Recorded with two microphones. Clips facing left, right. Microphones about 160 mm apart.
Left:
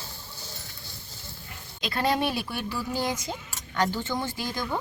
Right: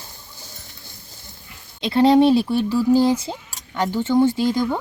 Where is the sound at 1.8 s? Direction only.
25° right (ahead or behind).